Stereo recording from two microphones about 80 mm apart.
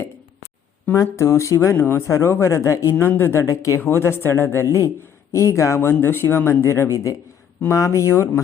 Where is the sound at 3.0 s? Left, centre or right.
Left.